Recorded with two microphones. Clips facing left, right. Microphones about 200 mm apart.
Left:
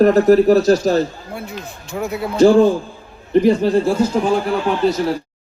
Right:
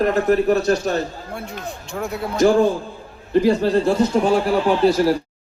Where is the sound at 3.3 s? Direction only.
15° left (ahead or behind).